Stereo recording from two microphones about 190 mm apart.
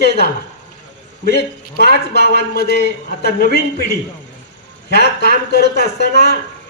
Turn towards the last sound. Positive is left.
turn(degrees=60)  # may be behind; listen again after turning